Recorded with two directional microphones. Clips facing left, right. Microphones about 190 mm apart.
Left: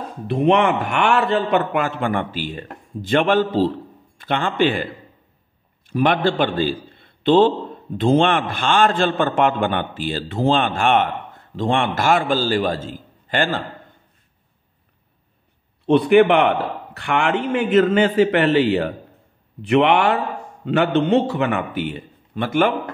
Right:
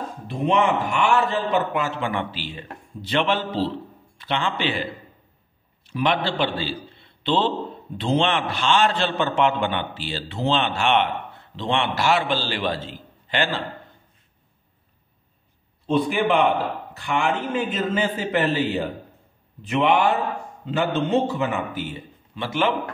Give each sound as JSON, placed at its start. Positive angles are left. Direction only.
{"t": 0.3, "sound": "a man's voice", "side_deg": 65}
{"t": 5.9, "sound": "a man's voice", "side_deg": 50}
{"t": 15.9, "sound": "a man's voice", "side_deg": 65}